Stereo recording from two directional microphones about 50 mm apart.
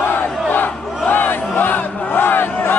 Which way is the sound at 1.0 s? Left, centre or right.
Left.